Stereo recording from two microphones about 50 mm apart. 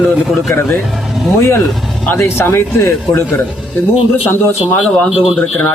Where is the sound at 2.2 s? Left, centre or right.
Left.